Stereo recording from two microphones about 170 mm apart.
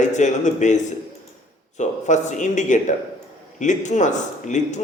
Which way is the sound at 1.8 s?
45° left (ahead or behind).